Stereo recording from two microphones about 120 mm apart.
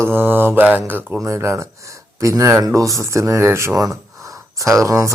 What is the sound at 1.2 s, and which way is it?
Speech, 25° right (ahead or behind).